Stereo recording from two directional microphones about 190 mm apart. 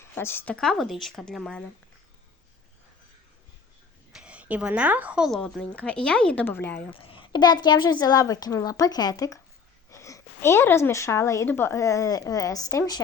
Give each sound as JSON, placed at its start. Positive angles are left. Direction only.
{"t": 0.0, "sound": "a woman's voice", "side_deg": 10}
{"t": 4.1, "sound": "a woman's voice", "side_deg": -5}
{"t": 6.9, "sound": "a woman's voice", "side_deg": 30}